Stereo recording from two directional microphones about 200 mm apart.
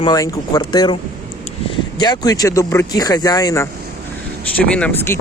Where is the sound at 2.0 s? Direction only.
20° left (ahead or behind).